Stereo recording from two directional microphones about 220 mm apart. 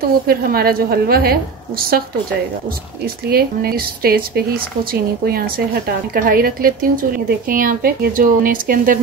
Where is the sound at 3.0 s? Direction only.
45° right (ahead or behind).